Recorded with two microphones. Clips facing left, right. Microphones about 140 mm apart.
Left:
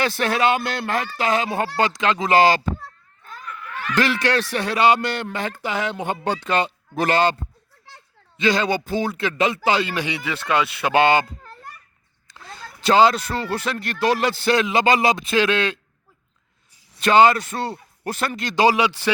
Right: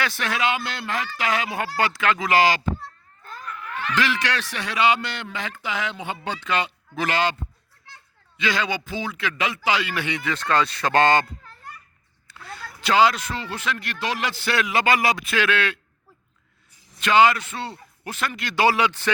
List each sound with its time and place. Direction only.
0.0 s speech: 35° left (ahead or behind)
1.0 s a man's voice: 35° left (ahead or behind)
3.4 s snicker: centre (ahead or behind)
3.9 s speech: 40° left (ahead or behind)
8.4 s speech: 35° left (ahead or behind)
9.9 s a man's voice: 15° left (ahead or behind)
12.3 s a man's voice: 20° left (ahead or behind); by 14.5 s 35° left (ahead or behind)
14.5 s a man's voice: 25° left (ahead or behind)
17.0 s speech: 35° left (ahead or behind)
18.5 s a man's voice: 15° left (ahead or behind)